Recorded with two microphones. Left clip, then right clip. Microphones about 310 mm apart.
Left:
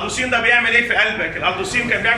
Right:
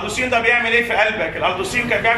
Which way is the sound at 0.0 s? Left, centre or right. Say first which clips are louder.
Even; centre.